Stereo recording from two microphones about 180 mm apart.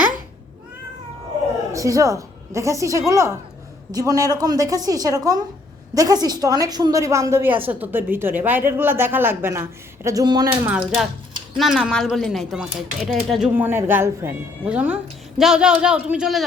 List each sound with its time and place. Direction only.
1.7 s a woman's voice: 15° right (ahead or behind)
10.7 s speech: 5° right (ahead or behind)